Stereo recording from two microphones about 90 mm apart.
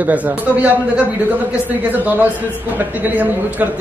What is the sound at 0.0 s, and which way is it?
A man's voice, 15° right (ahead or behind).